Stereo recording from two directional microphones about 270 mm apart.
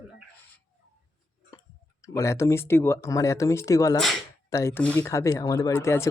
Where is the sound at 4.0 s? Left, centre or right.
Centre.